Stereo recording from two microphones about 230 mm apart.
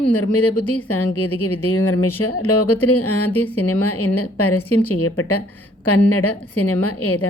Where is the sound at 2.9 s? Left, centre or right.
Left.